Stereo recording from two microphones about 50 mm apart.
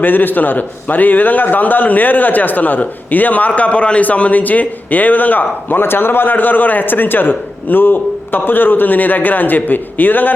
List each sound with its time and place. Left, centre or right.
0.0 s a man's voice: left